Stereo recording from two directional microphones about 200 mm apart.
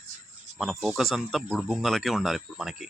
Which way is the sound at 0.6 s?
Centre (ahead or behind).